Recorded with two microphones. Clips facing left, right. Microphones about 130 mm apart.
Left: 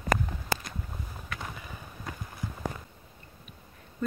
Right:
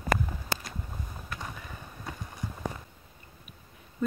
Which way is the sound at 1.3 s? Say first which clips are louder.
Even; 5° left (ahead or behind).